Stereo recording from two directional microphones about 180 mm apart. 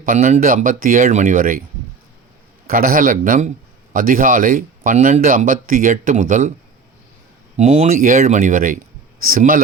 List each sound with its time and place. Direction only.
0.0 s speech: 45° right (ahead or behind)
2.6 s speech: 50° right (ahead or behind)
7.5 s speech: 40° right (ahead or behind)